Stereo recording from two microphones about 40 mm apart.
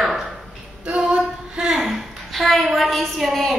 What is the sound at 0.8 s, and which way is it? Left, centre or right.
Female singing, right.